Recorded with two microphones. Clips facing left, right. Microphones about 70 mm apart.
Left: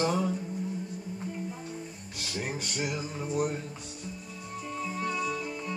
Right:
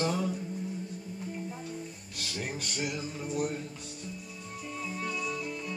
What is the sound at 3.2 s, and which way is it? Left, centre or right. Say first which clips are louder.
Speech: left 3 dB; left.